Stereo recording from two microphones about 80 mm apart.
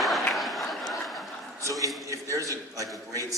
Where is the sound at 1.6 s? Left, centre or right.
Right.